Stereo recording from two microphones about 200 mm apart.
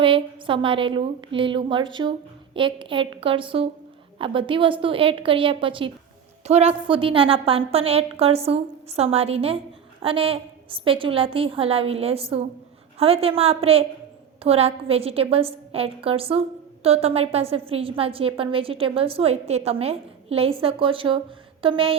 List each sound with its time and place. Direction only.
0.0 s a woman's voice: 25° right (ahead or behind)